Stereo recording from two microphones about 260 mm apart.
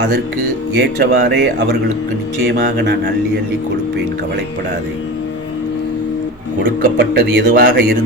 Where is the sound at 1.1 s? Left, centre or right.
Right.